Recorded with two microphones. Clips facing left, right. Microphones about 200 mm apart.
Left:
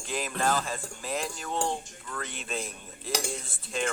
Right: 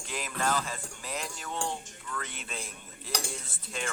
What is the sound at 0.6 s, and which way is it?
Speech, 50° left (ahead or behind).